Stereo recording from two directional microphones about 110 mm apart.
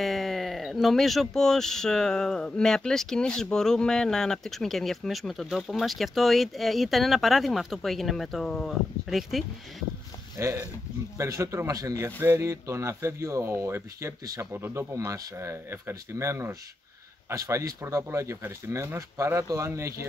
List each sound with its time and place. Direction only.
0.0 s speech: centre (ahead or behind)
10.3 s speech: 25° right (ahead or behind)